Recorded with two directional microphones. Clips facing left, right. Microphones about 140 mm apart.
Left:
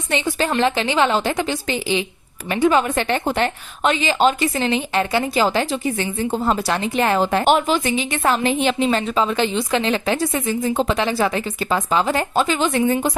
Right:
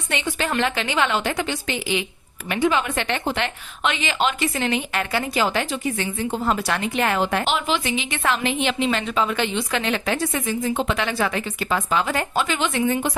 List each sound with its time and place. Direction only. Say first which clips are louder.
0.1 s a woman's voice: left 4 dB; 35° left (ahead or behind)
7.4 s a woman's voice: left 6 dB; 45° left (ahead or behind)